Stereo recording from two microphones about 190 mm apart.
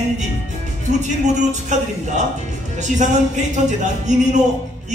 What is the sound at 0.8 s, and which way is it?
Speech, 40° right (ahead or behind).